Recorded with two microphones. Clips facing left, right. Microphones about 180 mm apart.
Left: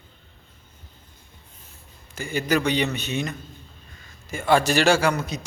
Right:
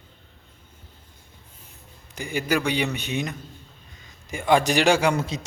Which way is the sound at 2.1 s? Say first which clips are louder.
Left 1 dB; 15° right (ahead or behind).